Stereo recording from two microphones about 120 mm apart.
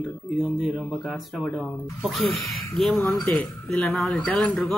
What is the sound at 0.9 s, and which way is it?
A man's voice, 5° left (ahead or behind).